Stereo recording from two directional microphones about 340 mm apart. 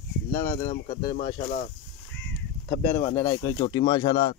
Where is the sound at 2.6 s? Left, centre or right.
Centre.